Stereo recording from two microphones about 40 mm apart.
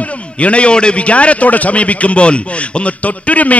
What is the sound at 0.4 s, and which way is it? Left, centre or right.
A man's voice, left.